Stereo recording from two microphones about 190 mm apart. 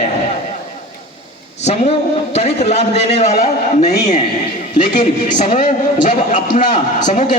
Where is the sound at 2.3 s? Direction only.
35° left (ahead or behind).